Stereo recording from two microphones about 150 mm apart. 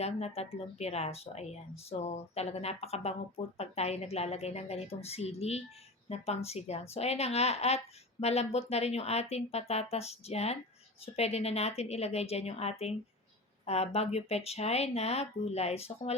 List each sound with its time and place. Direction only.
0.0 s speech: 45° left (ahead or behind)